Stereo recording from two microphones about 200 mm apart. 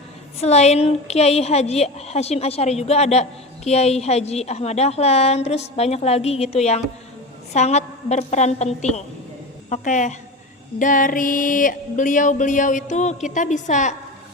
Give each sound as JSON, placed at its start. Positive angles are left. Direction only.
{"t": 0.4, "sound": "a woman's voice", "side_deg": 35}